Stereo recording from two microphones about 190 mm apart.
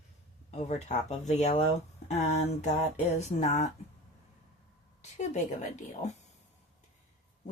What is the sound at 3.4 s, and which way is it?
Speech, 35° left (ahead or behind).